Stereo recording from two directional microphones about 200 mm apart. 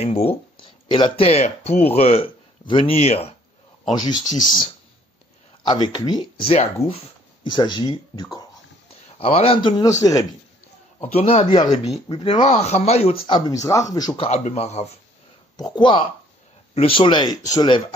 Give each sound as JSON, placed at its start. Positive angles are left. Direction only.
{"t": 0.0, "sound": "a man's voice", "side_deg": 30}
{"t": 11.0, "sound": "a man's voice", "side_deg": 30}
{"t": 13.3, "sound": "a man's voice", "side_deg": 15}
{"t": 15.5, "sound": "a man's voice", "side_deg": 20}